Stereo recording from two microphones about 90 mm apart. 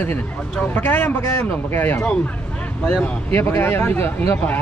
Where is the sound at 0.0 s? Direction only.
20° left (ahead or behind).